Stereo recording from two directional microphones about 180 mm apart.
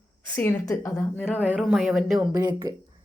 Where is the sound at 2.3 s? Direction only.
20° right (ahead or behind).